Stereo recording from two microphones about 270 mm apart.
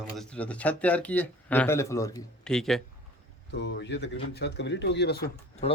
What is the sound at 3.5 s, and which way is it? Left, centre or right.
Speech, left.